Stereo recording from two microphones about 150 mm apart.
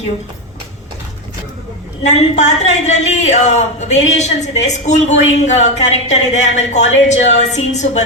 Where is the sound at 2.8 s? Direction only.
50° left (ahead or behind).